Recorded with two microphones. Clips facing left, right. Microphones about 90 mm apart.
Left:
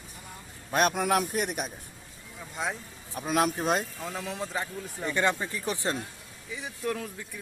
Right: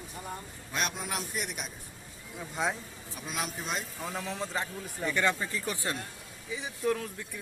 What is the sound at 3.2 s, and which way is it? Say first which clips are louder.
Speech: left 10 dB; 50° left (ahead or behind).